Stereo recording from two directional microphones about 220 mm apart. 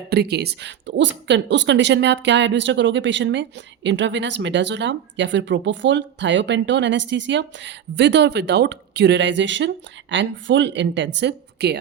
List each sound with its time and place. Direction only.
0.1 s speech: 50° right (ahead or behind)